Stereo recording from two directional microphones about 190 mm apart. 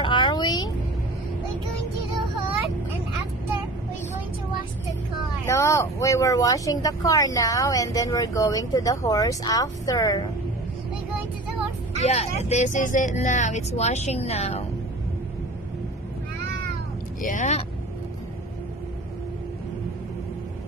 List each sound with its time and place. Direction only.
0.0 s a sound: 25° left (ahead or behind)
5.5 s speech: 15° left (ahead or behind)
11.9 s speech: 35° left (ahead or behind)
17.3 s speech: 40° left (ahead or behind)